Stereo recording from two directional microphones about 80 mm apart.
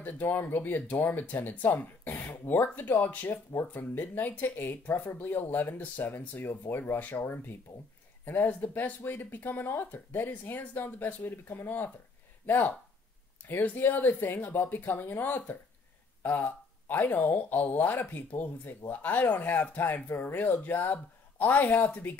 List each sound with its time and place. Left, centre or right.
0.0 s speech: left
13.4 s a sound: left
13.8 s speech: left